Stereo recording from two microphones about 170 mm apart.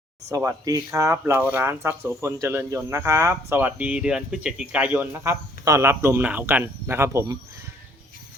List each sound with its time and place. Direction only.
0.3 s speech: 20° right (ahead or behind)